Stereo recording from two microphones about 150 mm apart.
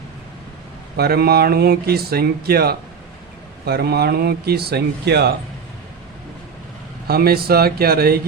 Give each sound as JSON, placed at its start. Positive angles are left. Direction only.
{"t": 0.9, "sound": "speech", "side_deg": -90}
{"t": 7.1, "sound": "speech", "side_deg": -90}